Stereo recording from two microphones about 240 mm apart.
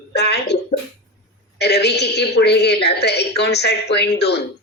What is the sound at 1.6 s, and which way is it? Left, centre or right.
A woman's voice, left.